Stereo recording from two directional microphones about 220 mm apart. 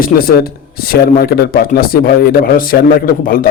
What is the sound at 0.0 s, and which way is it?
A man's voice, 40° left (ahead or behind).